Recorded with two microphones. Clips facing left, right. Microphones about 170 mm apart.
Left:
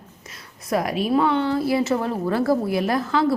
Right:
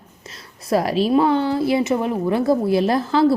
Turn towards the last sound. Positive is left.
turn(degrees=-30)  # may be behind; listen again after turning